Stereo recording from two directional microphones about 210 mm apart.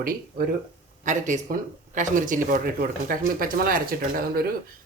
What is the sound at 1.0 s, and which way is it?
Frying, 35° right (ahead or behind).